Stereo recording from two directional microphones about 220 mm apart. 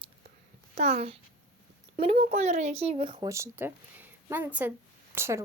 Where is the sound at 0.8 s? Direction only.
30° right (ahead or behind); by 5.4 s 10° right (ahead or behind).